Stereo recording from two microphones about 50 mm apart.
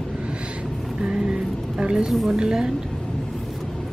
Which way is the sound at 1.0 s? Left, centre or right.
Centre.